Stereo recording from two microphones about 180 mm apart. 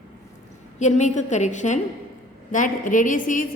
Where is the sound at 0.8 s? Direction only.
40° left (ahead or behind).